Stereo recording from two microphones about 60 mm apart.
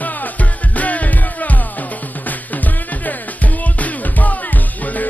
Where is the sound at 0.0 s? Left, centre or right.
Left.